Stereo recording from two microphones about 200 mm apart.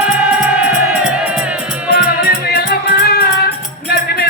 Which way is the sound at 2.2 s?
50° left (ahead or behind).